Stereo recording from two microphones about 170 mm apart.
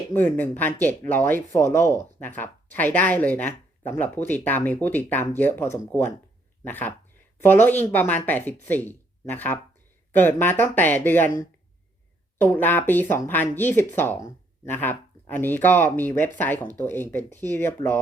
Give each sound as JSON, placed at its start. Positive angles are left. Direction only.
{"t": 0.1, "sound": "speech", "side_deg": 10}
{"t": 6.7, "sound": "speech", "side_deg": 10}